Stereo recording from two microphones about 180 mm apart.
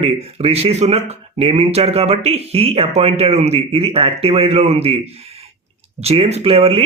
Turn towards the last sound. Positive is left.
turn(degrees=-35)  # may be behind; listen again after turning